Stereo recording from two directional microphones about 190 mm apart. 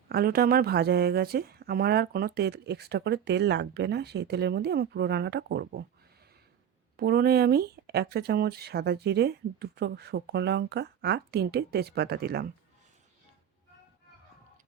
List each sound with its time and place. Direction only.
0.1 s speech: 50° right (ahead or behind)
6.9 s speech: 55° right (ahead or behind)